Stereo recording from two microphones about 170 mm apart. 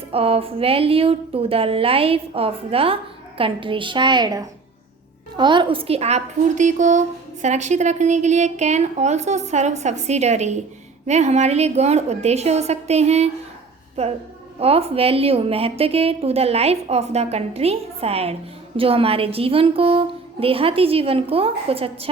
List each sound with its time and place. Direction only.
0.1 s a woman's voice: 35° right (ahead or behind)